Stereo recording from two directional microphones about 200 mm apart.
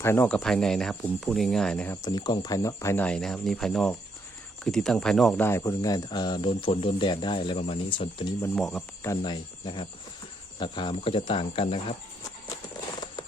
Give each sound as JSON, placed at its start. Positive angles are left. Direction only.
{"t": 0.0, "sound": "speech", "side_deg": 10}
{"t": 2.0, "sound": "speech", "side_deg": 20}
{"t": 8.5, "sound": "speech", "side_deg": 0}
{"t": 9.0, "sound": "speech", "side_deg": 20}